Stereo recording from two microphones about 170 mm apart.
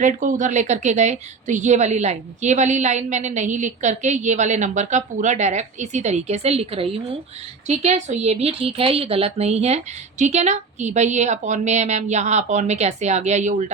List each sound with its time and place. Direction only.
0.0 s a woman's voice: 45° right (ahead or behind)